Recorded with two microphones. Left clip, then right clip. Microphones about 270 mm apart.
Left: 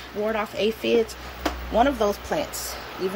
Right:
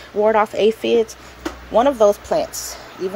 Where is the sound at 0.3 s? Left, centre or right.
Centre.